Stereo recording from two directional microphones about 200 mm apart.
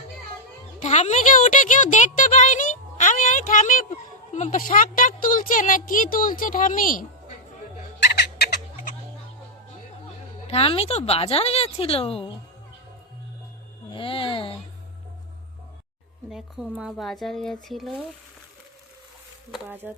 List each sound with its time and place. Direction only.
0.8 s a sound: 35° left (ahead or behind)
4.3 s a woman's voice: 35° left (ahead or behind)
7.9 s fowl: 55° left (ahead or behind)
10.4 s speech: 30° left (ahead or behind)
13.9 s a sound: 25° left (ahead or behind)
16.3 s speech: 5° right (ahead or behind)
19.5 s speech: 10° right (ahead or behind)